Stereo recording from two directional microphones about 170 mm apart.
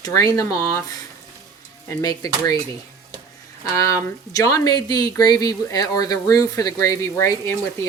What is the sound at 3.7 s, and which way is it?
Speech, 20° left (ahead or behind).